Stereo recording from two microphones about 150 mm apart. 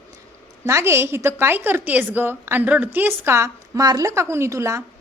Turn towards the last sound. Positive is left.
turn(degrees=-20)  # may be behind; listen again after turning